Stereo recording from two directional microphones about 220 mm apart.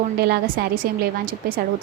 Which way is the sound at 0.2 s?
45° right (ahead or behind).